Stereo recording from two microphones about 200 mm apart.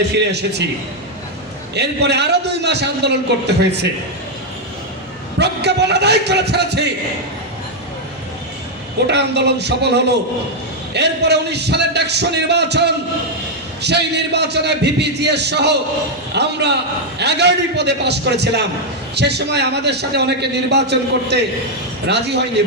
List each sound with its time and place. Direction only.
0.1 s a man's voice: 55° right (ahead or behind)
1.7 s a man's voice: 55° right (ahead or behind)
5.4 s a man's voice: 55° right (ahead or behind)
9.0 s a man's voice: 55° right (ahead or behind)